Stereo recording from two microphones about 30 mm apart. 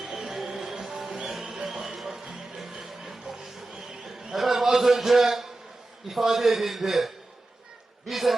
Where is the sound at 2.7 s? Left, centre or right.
Right.